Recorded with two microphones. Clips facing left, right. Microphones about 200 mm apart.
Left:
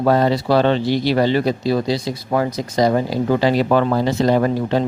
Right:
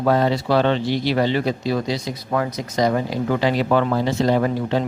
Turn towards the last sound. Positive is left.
turn(degrees=40)  # may be behind; listen again after turning